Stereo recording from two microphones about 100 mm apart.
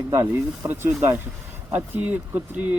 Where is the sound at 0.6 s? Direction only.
25° right (ahead or behind).